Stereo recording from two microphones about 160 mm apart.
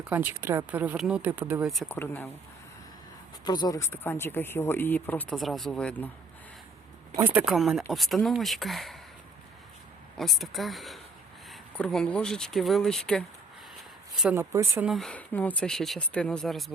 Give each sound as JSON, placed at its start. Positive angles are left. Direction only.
{"t": 0.1, "sound": "speech", "side_deg": -15}
{"t": 1.6, "sound": "speech", "side_deg": 0}
{"t": 1.9, "sound": "speech", "side_deg": 10}
{"t": 3.4, "sound": "speech", "side_deg": 25}
{"t": 7.2, "sound": "speech", "side_deg": -5}
{"t": 10.2, "sound": "speech", "side_deg": 0}
{"t": 14.3, "sound": "speech", "side_deg": -15}
{"t": 14.8, "sound": "speech", "side_deg": 0}